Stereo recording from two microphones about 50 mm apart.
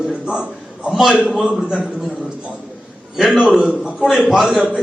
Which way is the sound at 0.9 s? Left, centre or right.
Centre.